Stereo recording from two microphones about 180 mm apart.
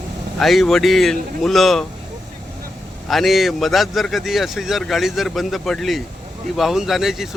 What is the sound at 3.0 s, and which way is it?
Speech, centre (ahead or behind).